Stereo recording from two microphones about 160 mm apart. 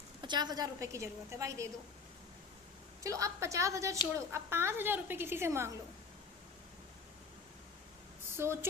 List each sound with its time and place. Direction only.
0.2 s a woman's voice: 30° right (ahead or behind)
3.0 s a woman's voice: 20° right (ahead or behind)
8.4 s a woman's voice: 15° right (ahead or behind)